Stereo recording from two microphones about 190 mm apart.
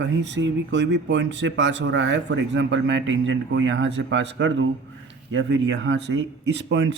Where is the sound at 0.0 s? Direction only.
70° right (ahead or behind).